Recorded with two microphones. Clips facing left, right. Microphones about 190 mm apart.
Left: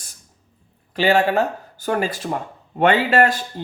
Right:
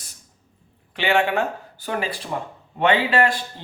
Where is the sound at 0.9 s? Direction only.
40° left (ahead or behind).